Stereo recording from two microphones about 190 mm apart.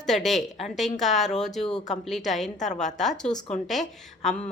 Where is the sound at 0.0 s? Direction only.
Centre (ahead or behind).